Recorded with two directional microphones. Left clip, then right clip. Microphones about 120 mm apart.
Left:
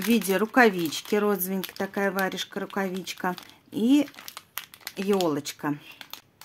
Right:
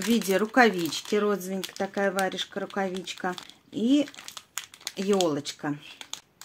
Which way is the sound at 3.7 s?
30° left (ahead or behind).